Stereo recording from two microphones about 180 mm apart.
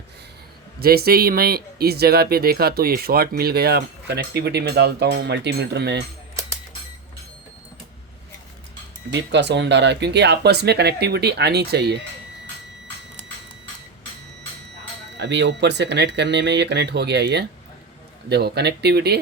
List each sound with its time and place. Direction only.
0.8 s speech: 60° right (ahead or behind)
9.1 s speech: 75° right (ahead or behind)
15.2 s speech: 75° right (ahead or behind)